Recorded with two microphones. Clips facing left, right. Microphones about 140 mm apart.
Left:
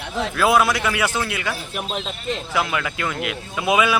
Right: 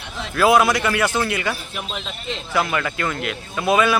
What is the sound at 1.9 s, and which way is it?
Speech, 45° left (ahead or behind).